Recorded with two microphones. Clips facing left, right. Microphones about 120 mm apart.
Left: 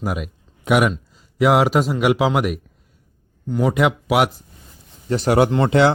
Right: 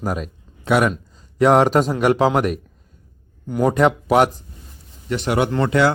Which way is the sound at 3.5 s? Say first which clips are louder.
Right 1 dB; 10° right (ahead or behind).